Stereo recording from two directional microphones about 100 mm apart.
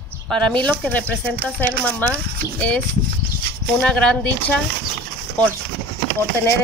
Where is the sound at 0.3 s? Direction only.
10° left (ahead or behind).